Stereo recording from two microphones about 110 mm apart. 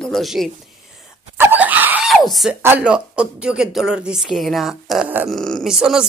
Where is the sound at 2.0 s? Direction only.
Centre (ahead or behind).